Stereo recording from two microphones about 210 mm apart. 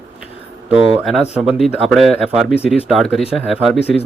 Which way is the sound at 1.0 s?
Centre (ahead or behind).